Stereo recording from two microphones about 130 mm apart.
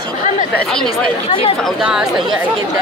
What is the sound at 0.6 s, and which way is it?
Speech, 5° left (ahead or behind).